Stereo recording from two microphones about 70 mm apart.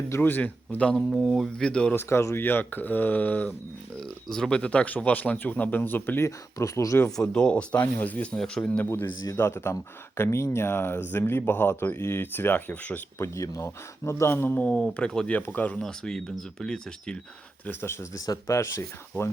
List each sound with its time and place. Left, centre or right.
0.2 s speech: left
1.4 s speech: centre
1.9 s speech: left
4.3 s speech: centre; by 6.2 s left
6.2 s speech: left
7.2 s speech: centre
8.4 s speech: centre
8.9 s speech: left
13.1 s speech: left
14.5 s speech: centre
15.3 s speech: left
15.8 s speech: centre
17.7 s speech: left
18.1 s speech: left